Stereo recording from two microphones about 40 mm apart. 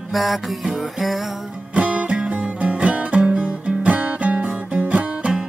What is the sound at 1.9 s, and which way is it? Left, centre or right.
Music, right.